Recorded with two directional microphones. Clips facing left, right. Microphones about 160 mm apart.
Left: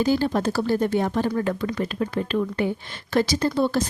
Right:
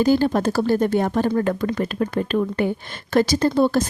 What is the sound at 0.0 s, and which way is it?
Speech, 50° right (ahead or behind).